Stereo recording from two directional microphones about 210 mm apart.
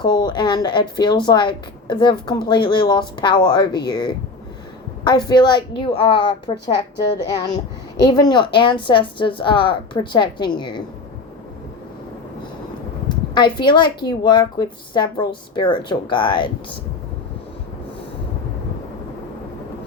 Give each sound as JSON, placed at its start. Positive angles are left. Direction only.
{"t": 0.0, "sound": "a woman's voice", "side_deg": 20}
{"t": 13.3, "sound": "a woman's voice", "side_deg": 20}